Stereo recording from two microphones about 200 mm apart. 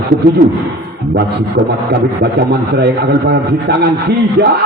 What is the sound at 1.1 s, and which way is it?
A man's voice, 55° right (ahead or behind).